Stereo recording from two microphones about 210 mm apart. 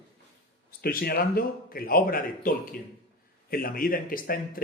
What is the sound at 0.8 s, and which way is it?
Speech, 45° left (ahead or behind).